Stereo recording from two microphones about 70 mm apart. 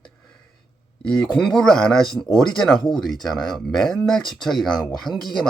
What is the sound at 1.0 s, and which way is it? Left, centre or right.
Speech, centre.